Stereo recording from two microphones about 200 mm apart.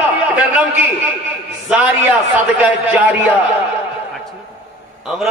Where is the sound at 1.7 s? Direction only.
5° right (ahead or behind).